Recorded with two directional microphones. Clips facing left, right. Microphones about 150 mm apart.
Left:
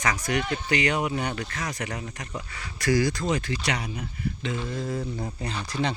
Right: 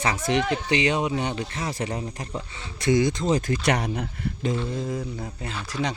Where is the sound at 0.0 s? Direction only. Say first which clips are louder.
Right 3 dB; 25° right (ahead or behind).